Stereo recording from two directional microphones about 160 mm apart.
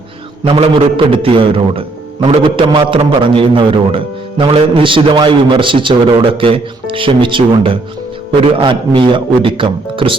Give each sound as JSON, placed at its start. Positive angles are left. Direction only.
{"t": 0.4, "sound": "a man's voice", "side_deg": -35}